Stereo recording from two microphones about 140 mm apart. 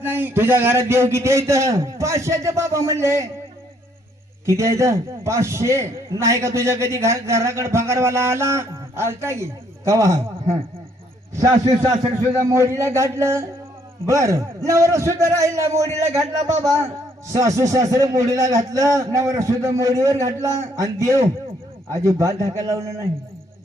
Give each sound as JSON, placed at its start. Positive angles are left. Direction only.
{"t": 0.0, "sound": "a man's voice", "side_deg": -15}
{"t": 4.4, "sound": "a man's voice", "side_deg": -20}
{"t": 12.3, "sound": "a man's voice", "side_deg": -20}